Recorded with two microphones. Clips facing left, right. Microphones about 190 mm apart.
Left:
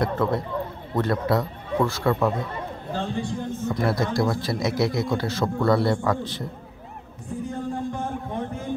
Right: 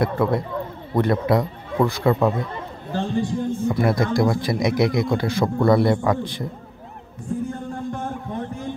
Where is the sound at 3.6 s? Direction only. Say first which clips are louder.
Right 3 dB; 15° right (ahead or behind).